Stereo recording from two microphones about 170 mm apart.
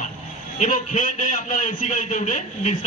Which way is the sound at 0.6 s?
40° left (ahead or behind).